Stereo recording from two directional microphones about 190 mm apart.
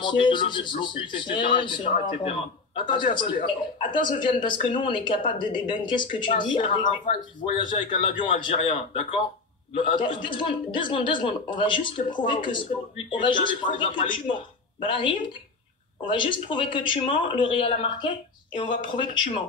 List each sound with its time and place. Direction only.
0.0 s a man's voice: 25° left (ahead or behind)
9.8 s a man's voice: 25° left (ahead or behind)